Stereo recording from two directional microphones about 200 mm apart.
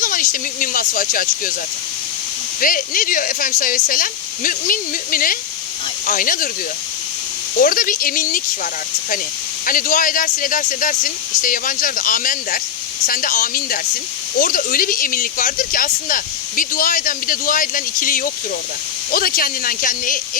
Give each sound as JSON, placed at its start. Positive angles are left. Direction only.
{"t": 0.0, "sound": "speech", "side_deg": 45}
{"t": 2.6, "sound": "speech", "side_deg": 45}
{"t": 7.6, "sound": "speech", "side_deg": 45}
{"t": 9.6, "sound": "speech", "side_deg": 45}